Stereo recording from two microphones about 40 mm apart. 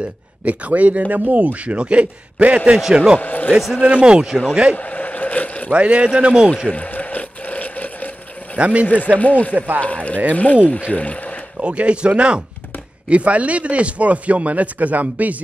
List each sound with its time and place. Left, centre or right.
0.5 s speech: right
3.2 s speech: left
3.8 s speech: right
4.7 s vehicle: left
5.7 s speech: right
6.7 s a sound: left
8.5 s speech: right
8.8 s speech: left
9.5 s speech: right
9.8 s speech: left
11.6 s speech: right